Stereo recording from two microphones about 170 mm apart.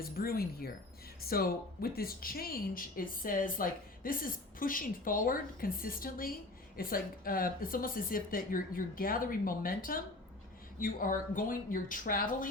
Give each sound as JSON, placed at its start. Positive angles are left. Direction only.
{"t": 0.0, "sound": "speech", "side_deg": 60}